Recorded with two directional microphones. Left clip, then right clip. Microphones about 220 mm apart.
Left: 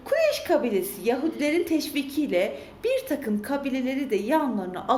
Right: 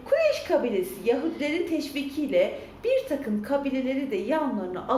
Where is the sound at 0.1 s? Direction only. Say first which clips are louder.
Even; 50° left (ahead or behind).